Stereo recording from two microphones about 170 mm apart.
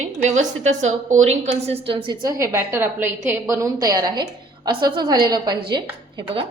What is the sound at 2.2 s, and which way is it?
A woman's voice, 20° right (ahead or behind).